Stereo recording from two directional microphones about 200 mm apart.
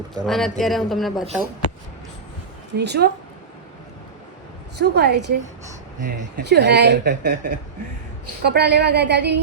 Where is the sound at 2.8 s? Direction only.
55° right (ahead or behind).